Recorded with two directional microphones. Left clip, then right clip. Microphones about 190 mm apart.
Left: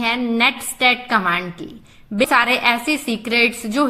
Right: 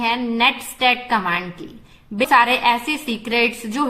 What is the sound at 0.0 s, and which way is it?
A woman's voice, 20° left (ahead or behind).